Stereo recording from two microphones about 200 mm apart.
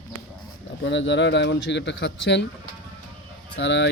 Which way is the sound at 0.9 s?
65° left (ahead or behind).